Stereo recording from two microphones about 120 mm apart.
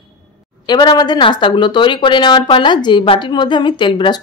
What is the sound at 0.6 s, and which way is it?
Speech, 35° left (ahead or behind).